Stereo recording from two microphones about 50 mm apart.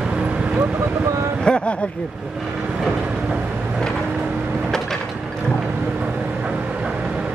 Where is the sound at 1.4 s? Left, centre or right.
Centre.